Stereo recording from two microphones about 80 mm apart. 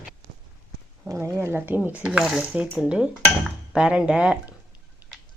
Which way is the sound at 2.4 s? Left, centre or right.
Centre.